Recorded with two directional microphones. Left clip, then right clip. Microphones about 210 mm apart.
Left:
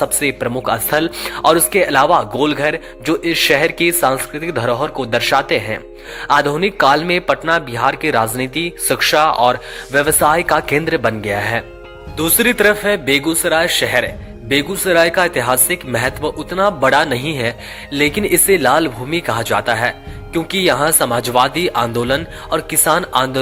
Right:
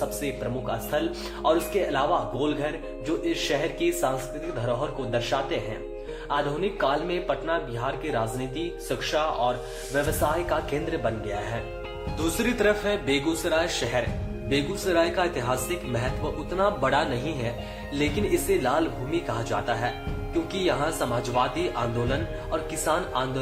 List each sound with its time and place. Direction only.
0.0 s a man's voice: 45° left (ahead or behind)
12.4 s speech: 35° left (ahead or behind)